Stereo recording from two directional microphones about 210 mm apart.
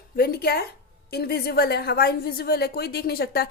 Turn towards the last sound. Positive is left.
turn(degrees=45)  # may be behind; listen again after turning